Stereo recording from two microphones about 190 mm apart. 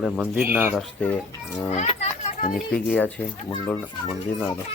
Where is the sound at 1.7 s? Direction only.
35° left (ahead or behind).